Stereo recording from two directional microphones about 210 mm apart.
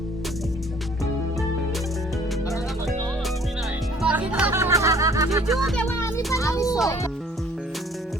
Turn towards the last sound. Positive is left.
turn(degrees=15)  # may be behind; listen again after turning